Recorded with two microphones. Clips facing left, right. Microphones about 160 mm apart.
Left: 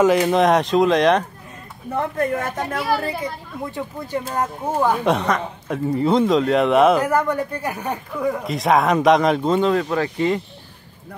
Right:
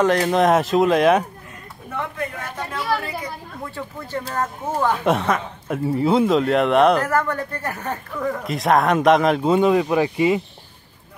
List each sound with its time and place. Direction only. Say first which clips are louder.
0.0 s speech: left 2 dB; 5° left (ahead or behind)
1.9 s speech: left 6 dB; 45° left (ahead or behind)
3.0 s a child's voice: left 4 dB; 25° left (ahead or behind)
5.0 s speech: even; 5° right (ahead or behind)
7.1 s speech: left 2 dB; 15° left (ahead or behind)
8.5 s speech: even; centre (ahead or behind)